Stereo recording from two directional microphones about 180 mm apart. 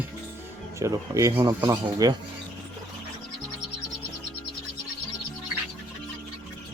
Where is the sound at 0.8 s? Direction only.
20° right (ahead or behind).